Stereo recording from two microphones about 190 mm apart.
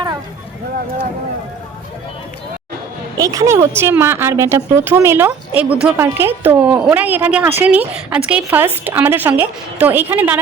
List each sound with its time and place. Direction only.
3.2 s a woman's voice: 20° right (ahead or behind)